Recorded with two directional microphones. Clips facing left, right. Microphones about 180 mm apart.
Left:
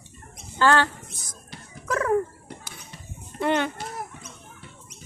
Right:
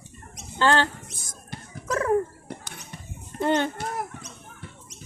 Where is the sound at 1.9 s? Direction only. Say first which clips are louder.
Even; 25° right (ahead or behind).